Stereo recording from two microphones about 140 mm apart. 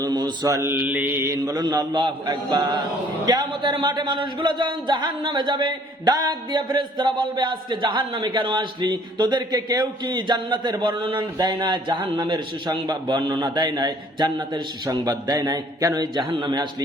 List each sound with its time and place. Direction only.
0.0 s mantra: 30° right (ahead or behind)
3.2 s speech: 30° right (ahead or behind)